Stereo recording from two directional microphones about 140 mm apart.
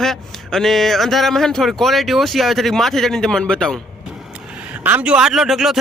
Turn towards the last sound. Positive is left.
turn(degrees=-5)  # may be behind; listen again after turning